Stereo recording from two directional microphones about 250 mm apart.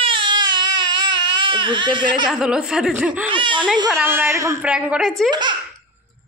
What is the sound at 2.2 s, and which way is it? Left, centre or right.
A woman's voice, centre.